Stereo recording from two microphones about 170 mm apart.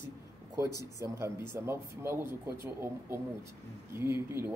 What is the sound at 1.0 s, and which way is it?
Speech, 15° right (ahead or behind).